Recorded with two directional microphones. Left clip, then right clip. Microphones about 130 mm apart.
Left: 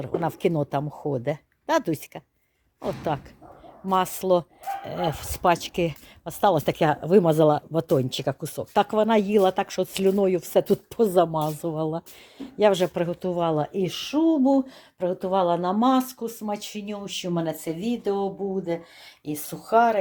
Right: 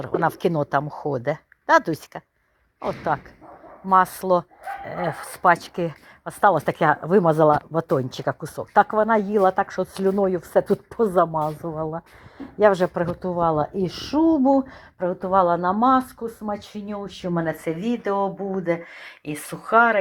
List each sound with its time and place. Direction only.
0.2 s speech: 20° left (ahead or behind)
3.1 s speech: 35° left (ahead or behind)
11.3 s speech: 35° left (ahead or behind)
12.4 s a woman's voice: 20° left (ahead or behind)
17.7 s speech: 25° left (ahead or behind)
18.0 s speech: centre (ahead or behind)
19.6 s a woman's voice: 15° left (ahead or behind)